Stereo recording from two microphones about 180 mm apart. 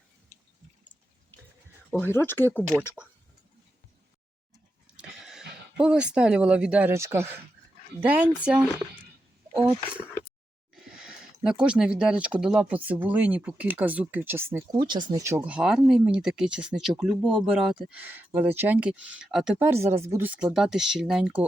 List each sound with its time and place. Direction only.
1.9 s speech: 10° left (ahead or behind)
4.9 s speech: 5° right (ahead or behind)
10.8 s speech: 5° right (ahead or behind)
14.8 s speech: 25° right (ahead or behind); by 21.4 s 5° right (ahead or behind)